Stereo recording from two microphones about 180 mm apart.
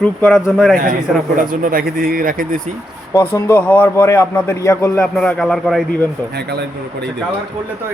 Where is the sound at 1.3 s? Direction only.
50° right (ahead or behind).